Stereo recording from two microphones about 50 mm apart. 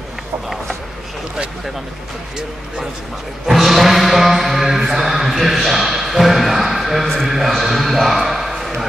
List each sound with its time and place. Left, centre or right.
3.4 s speech: centre